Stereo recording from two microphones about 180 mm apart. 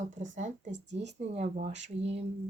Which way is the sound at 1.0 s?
40° right (ahead or behind).